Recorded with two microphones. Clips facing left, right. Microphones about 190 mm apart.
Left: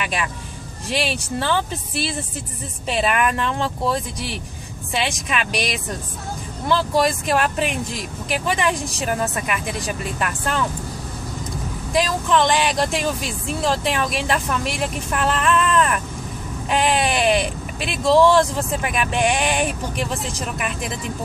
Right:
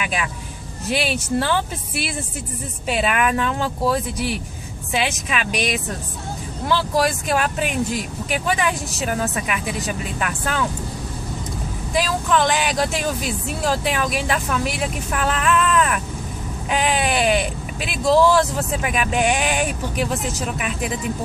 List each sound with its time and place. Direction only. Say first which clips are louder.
0.8 s speech: right 2 dB; 5° right (ahead or behind)
2.9 s speech: even; centre (ahead or behind)
11.9 s speech: left 1 dB; 5° right (ahead or behind)